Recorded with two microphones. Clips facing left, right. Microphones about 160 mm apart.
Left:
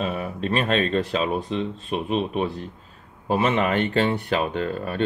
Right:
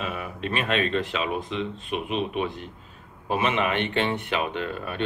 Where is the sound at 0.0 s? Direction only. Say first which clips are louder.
Left 5 dB; 35° left (ahead or behind).